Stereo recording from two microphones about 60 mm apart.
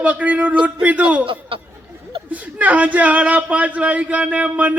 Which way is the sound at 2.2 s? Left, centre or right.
Right.